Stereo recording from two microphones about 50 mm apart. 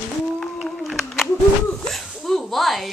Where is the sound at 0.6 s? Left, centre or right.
Centre.